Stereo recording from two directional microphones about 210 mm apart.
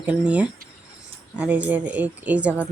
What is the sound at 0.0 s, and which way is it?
A woman's voice, 5° right (ahead or behind).